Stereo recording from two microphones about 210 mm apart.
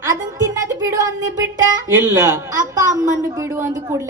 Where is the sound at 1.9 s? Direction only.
15° right (ahead or behind).